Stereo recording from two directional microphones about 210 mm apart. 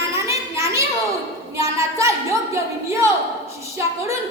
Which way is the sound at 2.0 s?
15° right (ahead or behind).